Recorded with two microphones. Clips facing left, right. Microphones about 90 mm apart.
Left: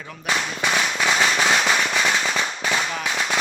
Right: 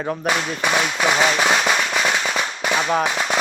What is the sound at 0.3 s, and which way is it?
Firecracker, 20° right (ahead or behind).